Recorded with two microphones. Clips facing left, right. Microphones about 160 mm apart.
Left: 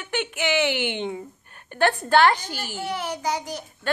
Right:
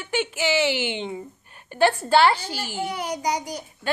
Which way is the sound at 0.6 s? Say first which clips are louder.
Right 1 dB; 55° left (ahead or behind).